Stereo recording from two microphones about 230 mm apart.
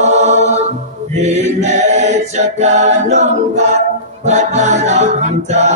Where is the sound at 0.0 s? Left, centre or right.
Right.